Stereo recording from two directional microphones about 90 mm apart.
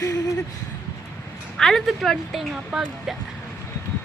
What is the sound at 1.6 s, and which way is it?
Speech, 5° left (ahead or behind).